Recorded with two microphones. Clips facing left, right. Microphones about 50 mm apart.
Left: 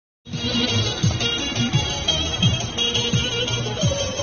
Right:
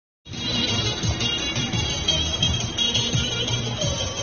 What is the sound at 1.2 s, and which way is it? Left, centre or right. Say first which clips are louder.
Music: left 2 dB; left.